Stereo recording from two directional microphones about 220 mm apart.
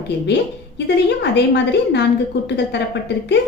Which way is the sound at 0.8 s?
50° left (ahead or behind).